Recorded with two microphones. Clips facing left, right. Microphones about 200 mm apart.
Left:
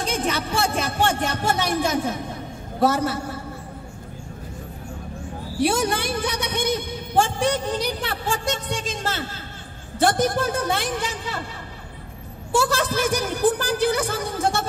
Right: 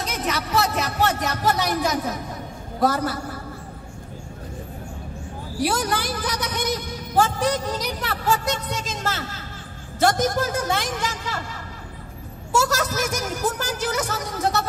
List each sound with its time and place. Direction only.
0.0 s music: 30° left (ahead or behind)
2.8 s a woman's voice: 25° left (ahead or behind)
5.6 s a woman's voice: 25° left (ahead or behind)
12.5 s a woman's voice: 30° left (ahead or behind)
13.6 s a woman's voice: 55° left (ahead or behind)
13.8 s a woman's voice: 30° left (ahead or behind)